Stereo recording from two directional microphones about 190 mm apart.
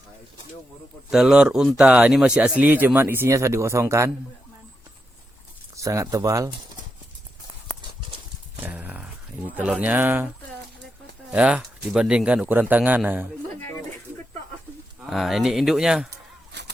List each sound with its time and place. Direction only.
1.1 s speech: 5° right (ahead or behind)
5.7 s speech: 15° right (ahead or behind)
8.6 s a sound: 10° right (ahead or behind)
9.6 s speech: 10° right (ahead or behind)
11.3 s speech: 5° right (ahead or behind)
15.0 s speech: centre (ahead or behind)
16.0 s a sound: 60° right (ahead or behind)